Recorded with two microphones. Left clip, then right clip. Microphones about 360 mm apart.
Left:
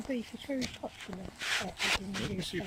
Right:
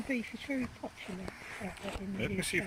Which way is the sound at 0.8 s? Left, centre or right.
Left.